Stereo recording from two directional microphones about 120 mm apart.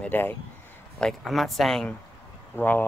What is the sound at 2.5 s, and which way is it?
Speech, 15° left (ahead or behind).